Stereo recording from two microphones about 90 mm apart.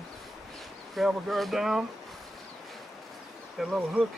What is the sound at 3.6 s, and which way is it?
Speech, centre (ahead or behind).